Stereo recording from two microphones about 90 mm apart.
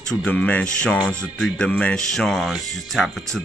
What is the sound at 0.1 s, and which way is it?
Speech, 15° left (ahead or behind).